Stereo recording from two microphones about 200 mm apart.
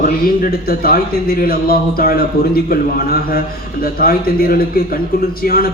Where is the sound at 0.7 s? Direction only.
50° left (ahead or behind).